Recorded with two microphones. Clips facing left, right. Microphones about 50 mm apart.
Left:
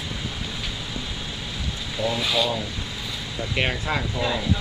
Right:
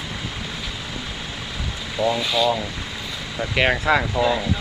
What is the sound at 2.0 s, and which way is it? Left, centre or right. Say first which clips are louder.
Speech: right 5 dB; right.